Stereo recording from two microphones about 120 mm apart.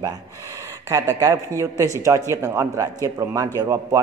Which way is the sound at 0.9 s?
25° right (ahead or behind).